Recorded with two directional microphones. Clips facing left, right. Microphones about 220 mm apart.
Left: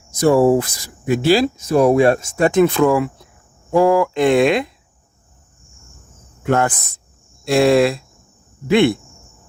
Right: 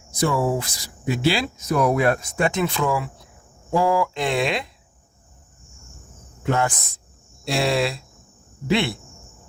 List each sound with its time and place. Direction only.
0.1 s speech: 45° left (ahead or behind)
1.5 s speech: 30° left (ahead or behind)
2.4 s speech: 50° left (ahead or behind)
6.5 s speech: 55° left (ahead or behind)